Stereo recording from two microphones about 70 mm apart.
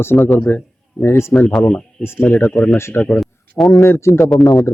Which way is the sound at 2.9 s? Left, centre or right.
Centre.